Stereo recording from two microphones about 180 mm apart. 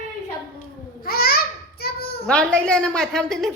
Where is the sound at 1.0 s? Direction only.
55° left (ahead or behind).